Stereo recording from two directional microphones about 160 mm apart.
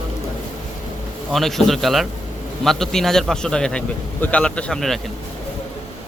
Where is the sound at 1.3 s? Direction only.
Centre (ahead or behind).